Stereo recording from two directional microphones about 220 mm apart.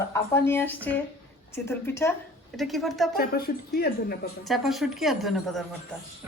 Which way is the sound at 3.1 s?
45° left (ahead or behind).